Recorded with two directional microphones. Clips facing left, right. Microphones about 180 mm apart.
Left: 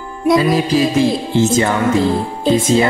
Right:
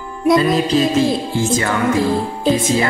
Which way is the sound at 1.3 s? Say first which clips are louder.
Left 4 dB; 20° left (ahead or behind).